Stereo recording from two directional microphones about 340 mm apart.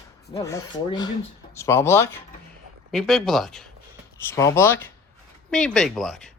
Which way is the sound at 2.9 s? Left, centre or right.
Centre.